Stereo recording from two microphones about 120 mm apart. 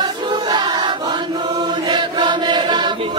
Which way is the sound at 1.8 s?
40° right (ahead or behind).